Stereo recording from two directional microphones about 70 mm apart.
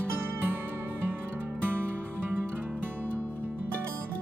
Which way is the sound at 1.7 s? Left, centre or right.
Right.